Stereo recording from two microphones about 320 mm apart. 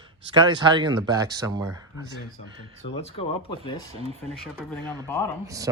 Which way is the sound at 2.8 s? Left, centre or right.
Centre.